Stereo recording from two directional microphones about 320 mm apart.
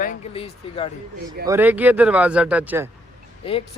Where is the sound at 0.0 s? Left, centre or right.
Left.